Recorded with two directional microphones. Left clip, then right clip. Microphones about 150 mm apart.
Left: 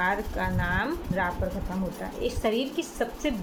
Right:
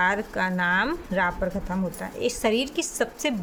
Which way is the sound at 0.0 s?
60° right (ahead or behind).